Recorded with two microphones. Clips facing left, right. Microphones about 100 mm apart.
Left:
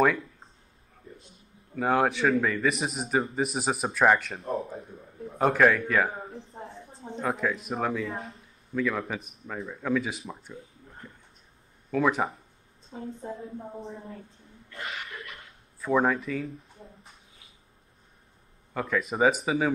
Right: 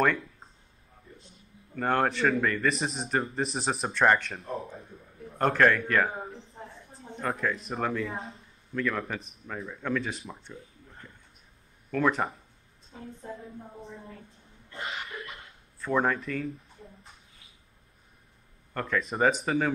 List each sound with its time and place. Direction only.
1.8 s a man's voice: 5° left (ahead or behind)
4.5 s a sound: 30° left (ahead or behind)
5.4 s a man's voice: 5° left (ahead or behind)
6.5 s a sound: 30° left (ahead or behind)
7.2 s a man's voice: centre (ahead or behind)
11.9 s a man's voice: 5° left (ahead or behind)
12.9 s a woman's voice: 30° left (ahead or behind)
14.7 s cough: 30° right (ahead or behind)
15.8 s a man's voice: 5° left (ahead or behind)
18.7 s a man's voice: 5° left (ahead or behind)